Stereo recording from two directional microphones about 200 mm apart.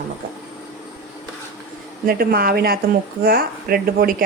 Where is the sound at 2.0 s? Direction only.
50° right (ahead or behind).